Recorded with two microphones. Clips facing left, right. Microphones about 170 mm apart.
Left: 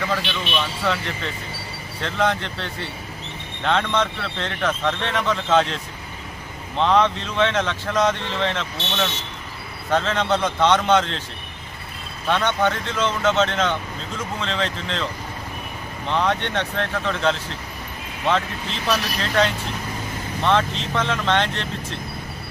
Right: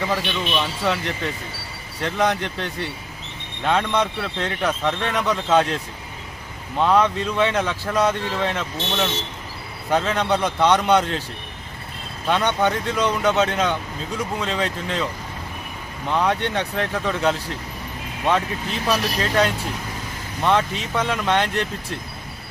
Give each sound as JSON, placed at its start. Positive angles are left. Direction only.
{"t": 0.0, "sound": "speech", "side_deg": -15}
{"t": 6.7, "sound": "speech", "side_deg": -10}
{"t": 12.3, "sound": "speech", "side_deg": -10}
{"t": 16.1, "sound": "speech", "side_deg": -10}
{"t": 18.9, "sound": "speech", "side_deg": -10}